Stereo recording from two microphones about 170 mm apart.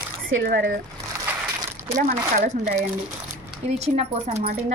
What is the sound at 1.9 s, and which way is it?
A woman's voice, 50° right (ahead or behind).